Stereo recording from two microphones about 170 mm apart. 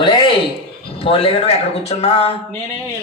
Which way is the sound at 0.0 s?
30° left (ahead or behind).